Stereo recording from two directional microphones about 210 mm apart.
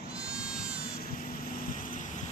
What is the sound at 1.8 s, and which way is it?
Vehicle, 40° left (ahead or behind).